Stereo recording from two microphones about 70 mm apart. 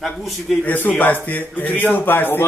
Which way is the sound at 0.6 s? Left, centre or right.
Left.